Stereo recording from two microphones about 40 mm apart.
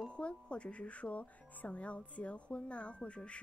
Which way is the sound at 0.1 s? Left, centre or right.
Left.